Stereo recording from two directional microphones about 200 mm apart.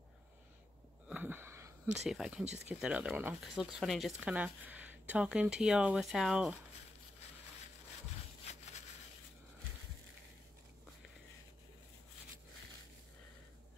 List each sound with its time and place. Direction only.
1.0 s wheeze: 10° right (ahead or behind)
2.0 s speech: 5° right (ahead or behind)
8.5 s a sound: 35° left (ahead or behind)